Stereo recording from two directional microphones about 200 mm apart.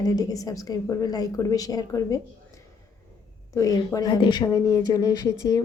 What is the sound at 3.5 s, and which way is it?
A woman's voice, 15° left (ahead or behind).